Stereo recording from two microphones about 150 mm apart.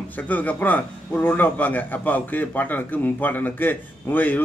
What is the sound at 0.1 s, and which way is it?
A man's voice, 10° left (ahead or behind).